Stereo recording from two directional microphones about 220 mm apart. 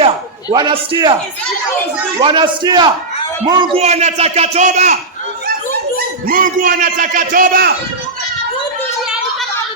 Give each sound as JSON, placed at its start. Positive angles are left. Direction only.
{"t": 0.5, "sound": "a man's voice", "side_deg": -20}
{"t": 2.1, "sound": "a man's voice", "side_deg": -20}
{"t": 3.8, "sound": "a man's voice", "side_deg": -30}
{"t": 6.2, "sound": "a man's voice", "side_deg": -40}